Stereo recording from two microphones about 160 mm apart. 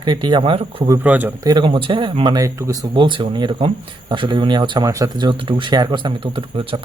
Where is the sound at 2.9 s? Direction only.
30° right (ahead or behind).